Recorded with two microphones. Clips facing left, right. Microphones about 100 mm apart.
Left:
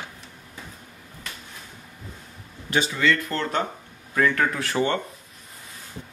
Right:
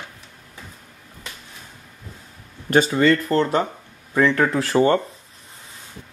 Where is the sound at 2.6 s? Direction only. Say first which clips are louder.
Right 6 dB; 45° right (ahead or behind).